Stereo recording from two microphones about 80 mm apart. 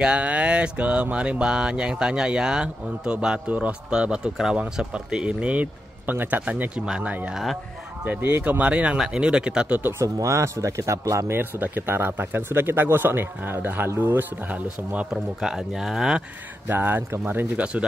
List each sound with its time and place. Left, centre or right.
0.0 s speech: centre
9.8 s speech: right
10.0 s speech: right; by 15.0 s centre
15.4 s speech: centre
16.6 s speech: right